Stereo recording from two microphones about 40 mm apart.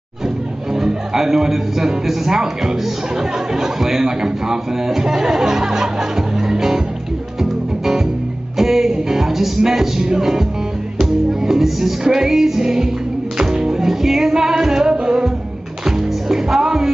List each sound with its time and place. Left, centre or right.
0.7 s a man's voice: centre
7.4 s music: centre
11.0 s a man's voice: centre
13.4 s music: centre
15.0 s a man's voice: centre
15.8 s music: centre